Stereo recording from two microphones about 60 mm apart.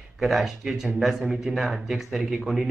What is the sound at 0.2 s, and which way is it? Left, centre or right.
Speech, centre.